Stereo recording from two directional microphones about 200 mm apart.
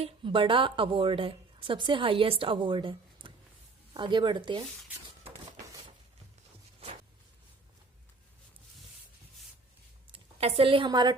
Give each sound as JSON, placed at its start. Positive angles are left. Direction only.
{"t": 0.0, "sound": "a woman's voice", "side_deg": -25}
{"t": 10.1, "sound": "a woman's voice", "side_deg": -30}